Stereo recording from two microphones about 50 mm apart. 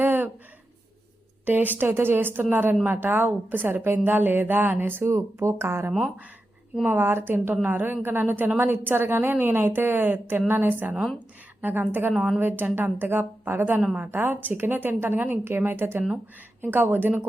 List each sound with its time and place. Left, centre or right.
0.0 s a sound: right
1.5 s a woman's voice: right
5.0 s speech: right
6.8 s a woman's voice: right
12.1 s a woman's voice: centre
12.4 s a woman's voice: right